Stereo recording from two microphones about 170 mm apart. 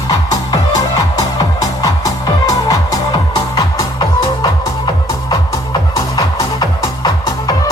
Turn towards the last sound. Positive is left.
turn(degrees=25)  # may be behind; listen again after turning